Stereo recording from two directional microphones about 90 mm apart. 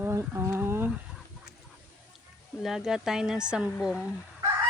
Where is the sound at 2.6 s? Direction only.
5° right (ahead or behind).